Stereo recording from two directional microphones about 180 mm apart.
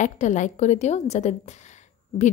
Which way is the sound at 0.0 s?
40° left (ahead or behind).